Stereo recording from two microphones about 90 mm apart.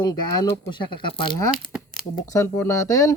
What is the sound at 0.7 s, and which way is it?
Speech, 65° left (ahead or behind).